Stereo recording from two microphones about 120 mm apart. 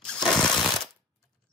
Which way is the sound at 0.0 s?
5° left (ahead or behind).